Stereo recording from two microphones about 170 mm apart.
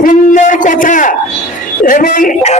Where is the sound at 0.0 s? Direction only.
50° left (ahead or behind).